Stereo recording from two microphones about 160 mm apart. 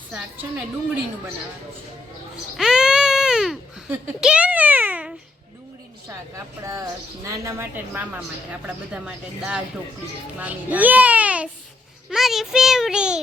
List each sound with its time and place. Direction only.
2.6 s baby cry: 5° right (ahead or behind)
3.9 s a child's voice: 5° right (ahead or behind)
6.1 s a woman's voice: 20° right (ahead or behind)